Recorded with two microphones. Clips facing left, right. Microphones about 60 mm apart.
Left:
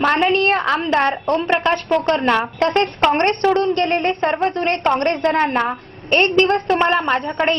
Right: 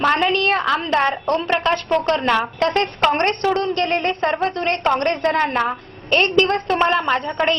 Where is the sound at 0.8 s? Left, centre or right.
Centre.